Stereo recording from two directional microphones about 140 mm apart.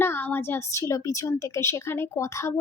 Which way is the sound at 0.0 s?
15° left (ahead or behind).